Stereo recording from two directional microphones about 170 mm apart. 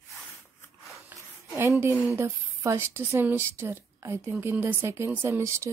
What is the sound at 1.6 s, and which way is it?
Speech, 15° right (ahead or behind).